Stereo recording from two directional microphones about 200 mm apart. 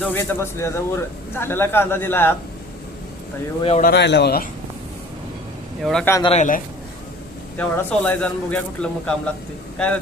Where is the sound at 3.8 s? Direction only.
50° left (ahead or behind).